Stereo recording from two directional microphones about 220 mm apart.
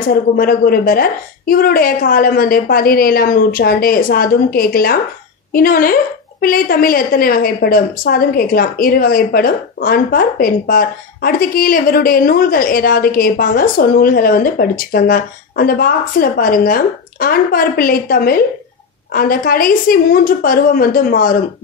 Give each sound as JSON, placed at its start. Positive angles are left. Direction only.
{"t": 0.1, "sound": "a woman's voice", "side_deg": 40}